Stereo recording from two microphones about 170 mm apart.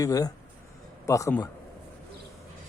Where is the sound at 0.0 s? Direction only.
20° left (ahead or behind).